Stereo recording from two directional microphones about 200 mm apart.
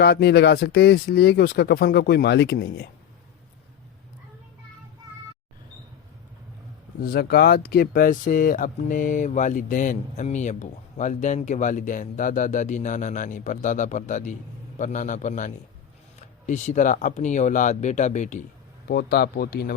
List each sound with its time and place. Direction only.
0.0 s speech: 55° left (ahead or behind)
7.0 s speech: 50° left (ahead or behind)
18.9 s speech: 50° left (ahead or behind)